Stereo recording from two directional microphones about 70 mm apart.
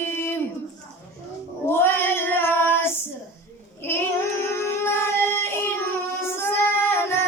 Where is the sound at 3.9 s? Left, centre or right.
Left.